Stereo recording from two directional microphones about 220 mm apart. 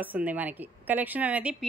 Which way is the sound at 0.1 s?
5° right (ahead or behind).